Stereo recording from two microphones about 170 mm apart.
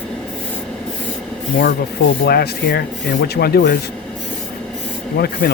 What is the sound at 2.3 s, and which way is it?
Speech, 65° left (ahead or behind).